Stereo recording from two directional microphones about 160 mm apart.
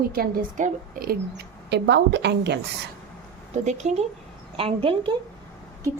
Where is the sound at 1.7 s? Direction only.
90° right.